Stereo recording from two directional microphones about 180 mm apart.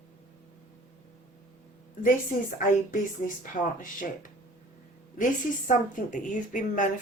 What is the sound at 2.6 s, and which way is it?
A woman's voice, 45° left (ahead or behind).